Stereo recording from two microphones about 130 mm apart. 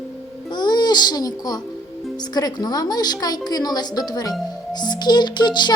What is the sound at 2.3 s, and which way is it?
A woman's voice, 30° left (ahead or behind).